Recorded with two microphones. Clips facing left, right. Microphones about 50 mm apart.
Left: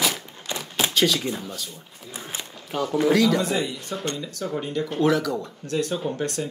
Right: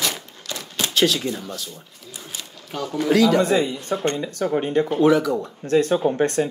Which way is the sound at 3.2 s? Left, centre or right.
Right.